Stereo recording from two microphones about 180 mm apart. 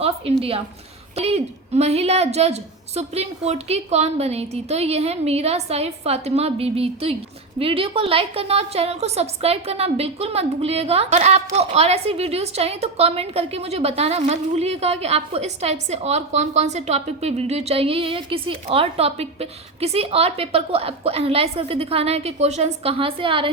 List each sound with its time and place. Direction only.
0.0 s a woman's voice: 35° right (ahead or behind)